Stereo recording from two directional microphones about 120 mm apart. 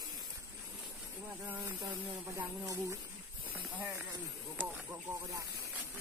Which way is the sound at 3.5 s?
15° right (ahead or behind).